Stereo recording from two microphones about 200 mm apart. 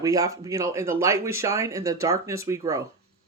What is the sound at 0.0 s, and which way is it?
Speech, 15° right (ahead or behind).